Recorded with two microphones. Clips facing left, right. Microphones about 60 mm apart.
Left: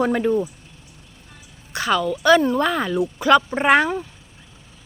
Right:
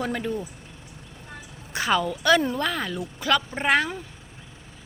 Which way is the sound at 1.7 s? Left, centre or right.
Centre.